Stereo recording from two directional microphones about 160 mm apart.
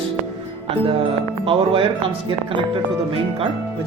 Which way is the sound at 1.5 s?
35° right (ahead or behind).